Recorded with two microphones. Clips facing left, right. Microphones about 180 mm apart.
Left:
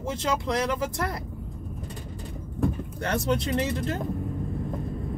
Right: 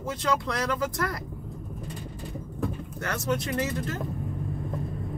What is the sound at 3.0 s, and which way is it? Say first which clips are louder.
Speech: left 2 dB; 25° left (ahead or behind).